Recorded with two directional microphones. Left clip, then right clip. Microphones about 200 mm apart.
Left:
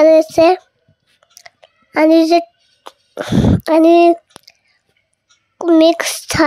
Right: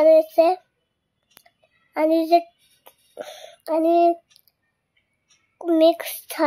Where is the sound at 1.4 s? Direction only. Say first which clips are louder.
Left 16 dB; 25° left (ahead or behind).